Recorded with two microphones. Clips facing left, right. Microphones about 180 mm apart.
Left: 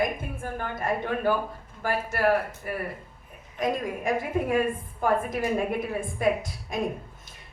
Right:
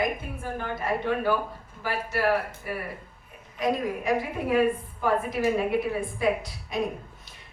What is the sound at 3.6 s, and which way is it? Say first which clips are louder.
Speech: right 1 dB; 50° left (ahead or behind).